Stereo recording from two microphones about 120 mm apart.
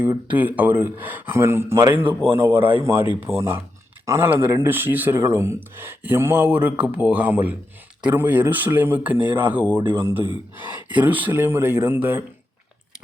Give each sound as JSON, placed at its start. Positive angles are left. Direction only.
{"t": 0.3, "sound": "speech", "side_deg": -15}